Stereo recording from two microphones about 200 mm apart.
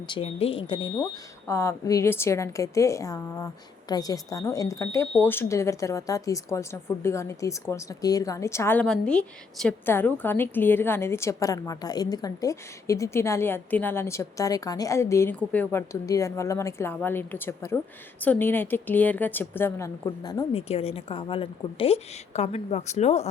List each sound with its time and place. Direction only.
0.1 s a woman's voice: 30° left (ahead or behind)
0.9 s a woman's voice: 15° left (ahead or behind); by 23.3 s 35° left (ahead or behind)